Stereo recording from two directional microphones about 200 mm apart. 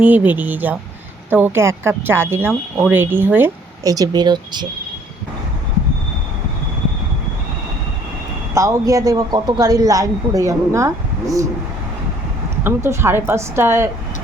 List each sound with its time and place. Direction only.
0.0 s speech: 10° right (ahead or behind)
8.5 s speech: 15° right (ahead or behind)
12.6 s speech: 10° right (ahead or behind)